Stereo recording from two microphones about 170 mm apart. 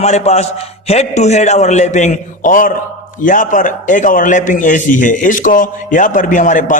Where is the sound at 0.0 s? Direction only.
40° left (ahead or behind).